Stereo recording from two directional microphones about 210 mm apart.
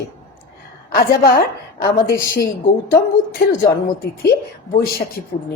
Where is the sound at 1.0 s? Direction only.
45° left (ahead or behind).